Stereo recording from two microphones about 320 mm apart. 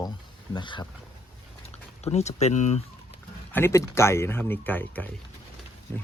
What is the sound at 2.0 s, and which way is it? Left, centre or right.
Speech, centre.